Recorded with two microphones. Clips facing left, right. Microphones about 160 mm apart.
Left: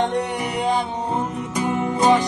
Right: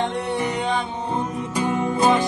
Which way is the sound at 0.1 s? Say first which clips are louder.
Even; 10° left (ahead or behind).